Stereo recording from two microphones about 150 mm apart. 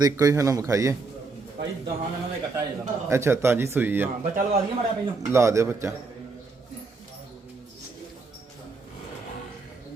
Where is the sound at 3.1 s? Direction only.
15° right (ahead or behind).